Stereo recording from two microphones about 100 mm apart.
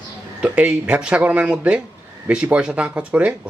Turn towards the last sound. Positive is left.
turn(degrees=-15)  # may be behind; listen again after turning